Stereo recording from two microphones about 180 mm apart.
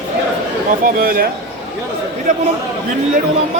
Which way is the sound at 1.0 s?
55° right (ahead or behind).